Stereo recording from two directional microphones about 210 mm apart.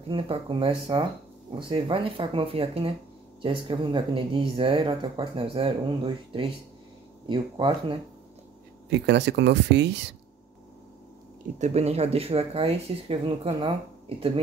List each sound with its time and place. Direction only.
0.1 s speech: 25° right (ahead or behind)
8.8 s speech: 55° right (ahead or behind)
11.5 s speech: 30° right (ahead or behind)